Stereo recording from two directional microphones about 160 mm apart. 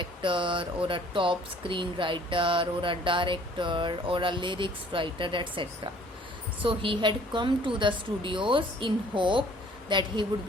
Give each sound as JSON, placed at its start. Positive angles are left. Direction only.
{"t": 0.0, "sound": "a man's voice", "side_deg": -30}